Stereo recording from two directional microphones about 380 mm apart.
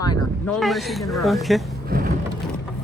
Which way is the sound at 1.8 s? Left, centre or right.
Right.